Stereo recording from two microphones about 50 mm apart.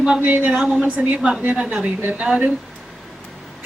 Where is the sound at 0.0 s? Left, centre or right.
Right.